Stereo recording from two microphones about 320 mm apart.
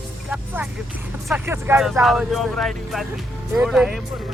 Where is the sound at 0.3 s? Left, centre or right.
Centre.